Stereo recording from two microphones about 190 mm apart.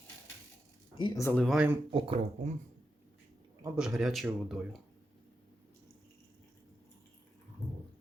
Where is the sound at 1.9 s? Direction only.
30° right (ahead or behind).